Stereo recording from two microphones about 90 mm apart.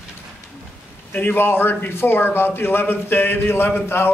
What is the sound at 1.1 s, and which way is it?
A man's voice, 20° left (ahead or behind).